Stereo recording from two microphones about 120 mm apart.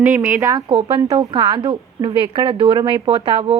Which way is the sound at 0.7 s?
45° right (ahead or behind).